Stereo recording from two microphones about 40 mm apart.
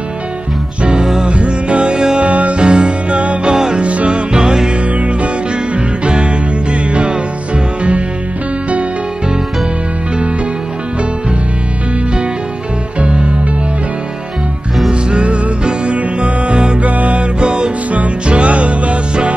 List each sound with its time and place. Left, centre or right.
0.8 s music: centre
1.3 s music: right
2.2 s music: right
2.6 s music: right
3.4 s music: centre
3.8 s music: right
4.9 s music: right
13.0 s music: right
14.9 s music: right
16.8 s music: right